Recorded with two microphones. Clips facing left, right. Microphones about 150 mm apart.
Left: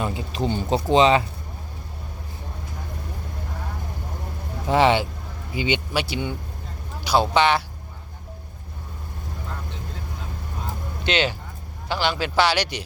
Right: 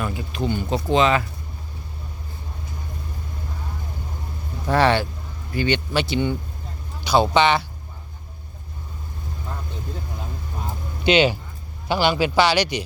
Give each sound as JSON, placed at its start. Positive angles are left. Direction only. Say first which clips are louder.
{"t": 0.0, "sound": "speech", "louder": "even", "side_deg": 25}
{"t": 4.6, "sound": "speech", "louder": "even", "side_deg": 15}
{"t": 11.0, "sound": "a man's voice", "louder": "right 6 dB", "side_deg": -5}